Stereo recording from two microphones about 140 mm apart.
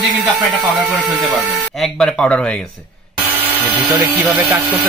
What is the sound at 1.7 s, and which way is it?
Speech, 5° left (ahead or behind).